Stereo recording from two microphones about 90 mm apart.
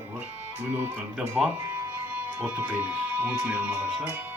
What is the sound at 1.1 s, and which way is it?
Speech, 15° right (ahead or behind).